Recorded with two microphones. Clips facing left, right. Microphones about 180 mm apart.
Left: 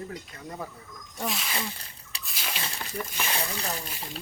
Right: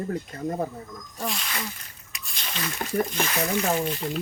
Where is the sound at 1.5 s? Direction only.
30° left (ahead or behind).